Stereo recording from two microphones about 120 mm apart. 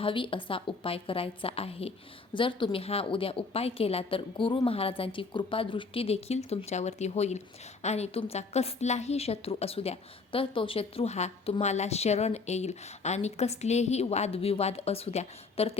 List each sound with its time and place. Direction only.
0.0 s a woman's voice: 45° left (ahead or behind)
2.3 s a woman's voice: 45° left (ahead or behind)